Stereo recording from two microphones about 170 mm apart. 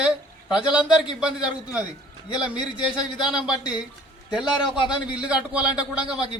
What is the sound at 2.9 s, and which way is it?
Speech, 25° left (ahead or behind).